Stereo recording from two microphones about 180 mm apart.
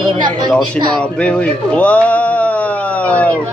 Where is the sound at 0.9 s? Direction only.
5° left (ahead or behind).